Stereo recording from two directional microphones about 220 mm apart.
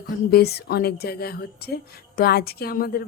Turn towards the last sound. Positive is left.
turn(degrees=45)  # may be behind; listen again after turning